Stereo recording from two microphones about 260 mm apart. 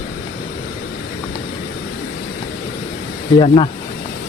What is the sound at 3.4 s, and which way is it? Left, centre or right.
Speech, left.